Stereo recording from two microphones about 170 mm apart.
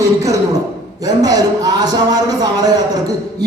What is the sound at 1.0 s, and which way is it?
A man's voice, 20° right (ahead or behind).